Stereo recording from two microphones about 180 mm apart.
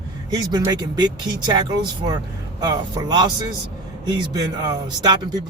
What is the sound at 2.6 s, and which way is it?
Speech, 20° right (ahead or behind).